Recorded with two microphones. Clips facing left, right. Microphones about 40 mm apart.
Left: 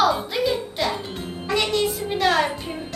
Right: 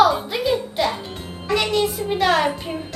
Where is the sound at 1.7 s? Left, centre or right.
Centre.